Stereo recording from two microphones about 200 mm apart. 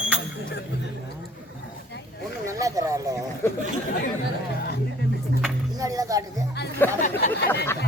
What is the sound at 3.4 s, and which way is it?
Chatter, 10° left (ahead or behind).